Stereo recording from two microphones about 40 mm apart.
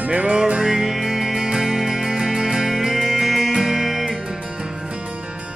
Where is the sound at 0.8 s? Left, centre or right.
Centre.